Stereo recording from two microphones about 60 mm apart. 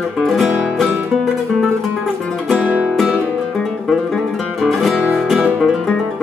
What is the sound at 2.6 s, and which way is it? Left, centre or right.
Music, right.